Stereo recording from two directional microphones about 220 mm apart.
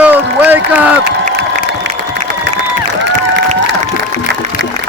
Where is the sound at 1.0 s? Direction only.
50° right (ahead or behind).